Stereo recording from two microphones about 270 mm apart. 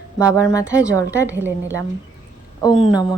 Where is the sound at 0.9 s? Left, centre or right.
Centre.